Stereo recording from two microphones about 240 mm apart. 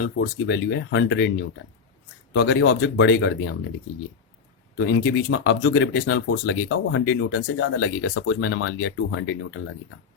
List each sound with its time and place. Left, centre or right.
0.3 s speech: left
2.3 s speech: left
4.9 s speech: left